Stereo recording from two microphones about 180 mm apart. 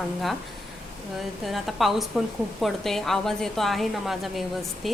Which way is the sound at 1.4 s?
Centre (ahead or behind).